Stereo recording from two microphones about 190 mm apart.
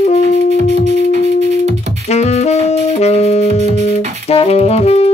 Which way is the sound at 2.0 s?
35° left (ahead or behind).